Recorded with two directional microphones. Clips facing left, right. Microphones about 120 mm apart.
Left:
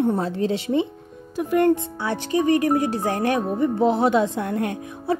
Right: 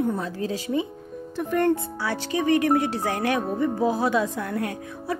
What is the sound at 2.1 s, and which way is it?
Speech, 40° left (ahead or behind).